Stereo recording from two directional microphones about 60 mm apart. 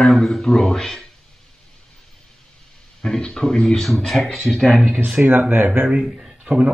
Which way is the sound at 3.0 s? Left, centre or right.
Centre.